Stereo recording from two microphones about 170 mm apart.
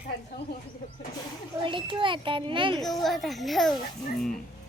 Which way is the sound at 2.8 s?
Centre (ahead or behind).